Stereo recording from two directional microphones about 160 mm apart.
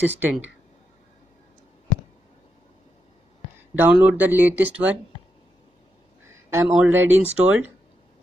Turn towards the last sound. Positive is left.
turn(degrees=-10)  # may be behind; listen again after turning